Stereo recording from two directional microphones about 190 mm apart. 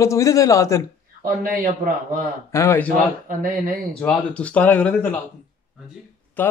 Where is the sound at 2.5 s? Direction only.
15° left (ahead or behind).